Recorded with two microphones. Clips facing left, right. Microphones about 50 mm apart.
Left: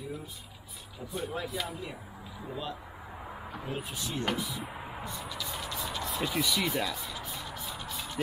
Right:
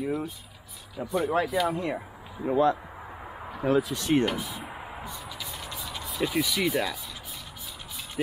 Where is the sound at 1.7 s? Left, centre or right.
Right.